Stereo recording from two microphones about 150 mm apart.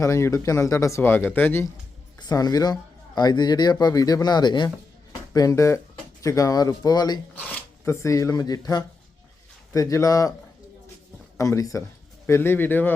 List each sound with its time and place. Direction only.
0.0 s speech: 20° left (ahead or behind)
2.1 s speech: 25° left (ahead or behind)
7.3 s speech: 15° left (ahead or behind)
11.3 s speech: 20° left (ahead or behind)